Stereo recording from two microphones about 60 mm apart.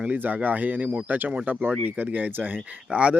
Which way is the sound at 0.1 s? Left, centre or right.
Right.